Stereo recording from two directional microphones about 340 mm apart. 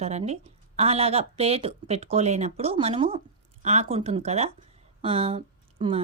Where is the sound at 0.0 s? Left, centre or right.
Centre.